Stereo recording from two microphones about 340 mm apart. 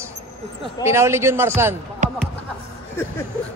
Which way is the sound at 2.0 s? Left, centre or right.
Right.